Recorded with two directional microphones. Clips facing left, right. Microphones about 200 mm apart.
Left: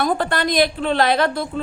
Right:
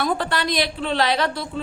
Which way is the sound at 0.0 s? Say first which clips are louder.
Left 3 dB; 50° left (ahead or behind).